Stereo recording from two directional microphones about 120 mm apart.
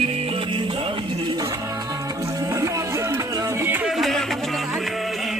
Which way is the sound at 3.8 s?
Centre (ahead or behind).